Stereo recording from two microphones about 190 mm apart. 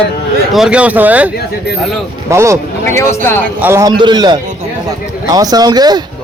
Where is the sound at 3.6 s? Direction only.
15° right (ahead or behind).